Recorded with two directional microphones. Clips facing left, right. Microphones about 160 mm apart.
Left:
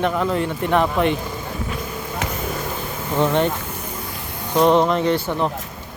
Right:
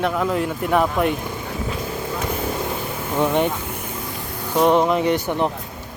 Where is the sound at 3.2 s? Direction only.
10° right (ahead or behind).